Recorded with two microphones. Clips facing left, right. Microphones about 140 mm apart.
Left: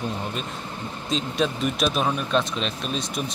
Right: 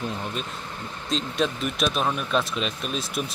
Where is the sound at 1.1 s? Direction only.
Centre (ahead or behind).